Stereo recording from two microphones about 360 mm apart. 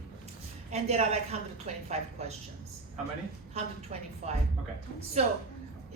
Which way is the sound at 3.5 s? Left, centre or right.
Centre.